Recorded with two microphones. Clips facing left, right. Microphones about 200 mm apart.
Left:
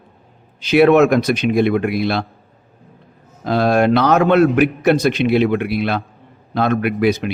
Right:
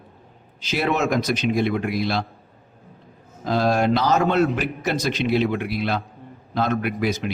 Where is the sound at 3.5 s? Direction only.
65° left (ahead or behind).